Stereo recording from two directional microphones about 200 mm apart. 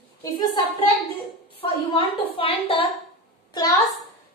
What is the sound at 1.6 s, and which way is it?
A woman's voice, 25° left (ahead or behind).